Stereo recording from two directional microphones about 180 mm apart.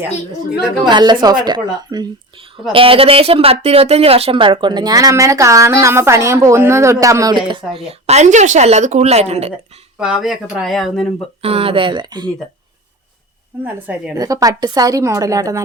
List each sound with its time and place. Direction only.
0.9 s a woman's voice: 25° right (ahead or behind)
10.0 s speech: 5° right (ahead or behind)
11.4 s speech: 35° right (ahead or behind)
14.2 s speech: 20° right (ahead or behind)